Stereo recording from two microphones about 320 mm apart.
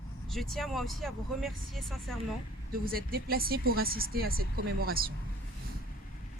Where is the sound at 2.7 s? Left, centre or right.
Right.